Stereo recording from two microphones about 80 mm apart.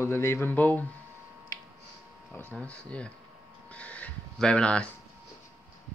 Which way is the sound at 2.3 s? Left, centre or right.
Centre.